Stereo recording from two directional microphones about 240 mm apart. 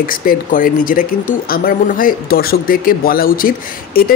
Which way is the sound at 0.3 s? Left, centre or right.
Left.